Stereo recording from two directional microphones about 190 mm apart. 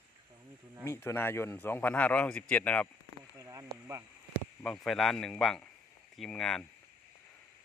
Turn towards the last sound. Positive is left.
turn(degrees=5)  # may be behind; listen again after turning